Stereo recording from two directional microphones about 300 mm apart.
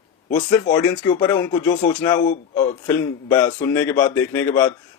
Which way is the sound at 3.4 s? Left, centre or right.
Centre.